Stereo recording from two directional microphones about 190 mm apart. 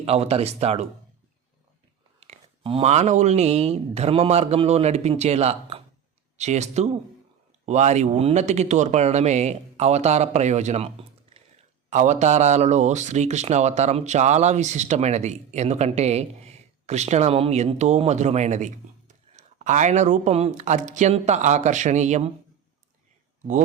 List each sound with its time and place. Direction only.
0.0 s speech: 30° right (ahead or behind)
2.2 s speech: 30° right (ahead or behind)